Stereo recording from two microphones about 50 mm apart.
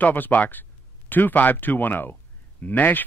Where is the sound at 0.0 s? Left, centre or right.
Left.